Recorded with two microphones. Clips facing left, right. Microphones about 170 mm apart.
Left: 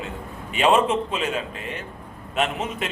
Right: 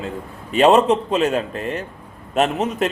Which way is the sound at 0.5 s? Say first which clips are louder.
Right 5 dB; 40° right (ahead or behind).